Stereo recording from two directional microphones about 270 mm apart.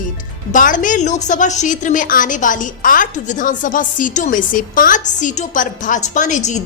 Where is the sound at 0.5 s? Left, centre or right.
Left.